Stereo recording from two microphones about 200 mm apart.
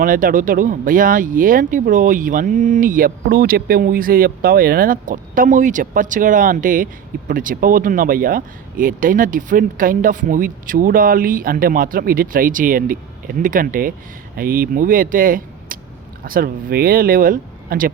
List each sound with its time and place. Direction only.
0.0 s speech: 45° right (ahead or behind)